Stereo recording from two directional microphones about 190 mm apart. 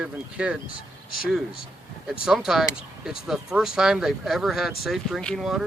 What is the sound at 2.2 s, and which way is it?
Speech, centre (ahead or behind).